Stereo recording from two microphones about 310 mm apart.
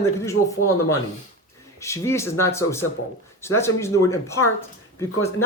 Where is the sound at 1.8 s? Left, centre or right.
Centre.